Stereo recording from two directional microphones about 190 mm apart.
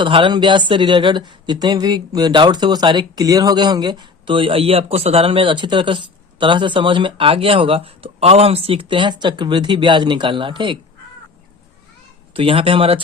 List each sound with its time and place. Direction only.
0.0 s speech: 25° right (ahead or behind)
12.3 s speech: 30° right (ahead or behind)